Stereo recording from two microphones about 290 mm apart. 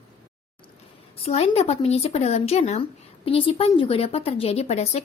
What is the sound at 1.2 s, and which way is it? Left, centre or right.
Speech, left.